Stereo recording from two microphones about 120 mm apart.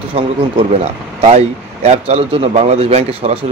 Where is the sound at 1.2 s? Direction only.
60° right (ahead or behind).